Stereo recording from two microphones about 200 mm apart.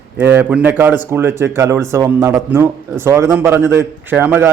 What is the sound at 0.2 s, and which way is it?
A man's voice, 10° right (ahead or behind).